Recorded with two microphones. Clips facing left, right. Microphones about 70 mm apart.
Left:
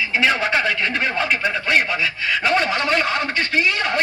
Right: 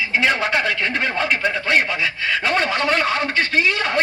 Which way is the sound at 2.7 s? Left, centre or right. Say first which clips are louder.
Right 1 dB; right.